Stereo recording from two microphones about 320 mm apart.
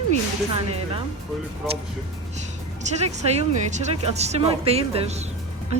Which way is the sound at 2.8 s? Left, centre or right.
Centre.